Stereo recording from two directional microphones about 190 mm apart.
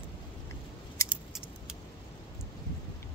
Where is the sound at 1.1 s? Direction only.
5° right (ahead or behind).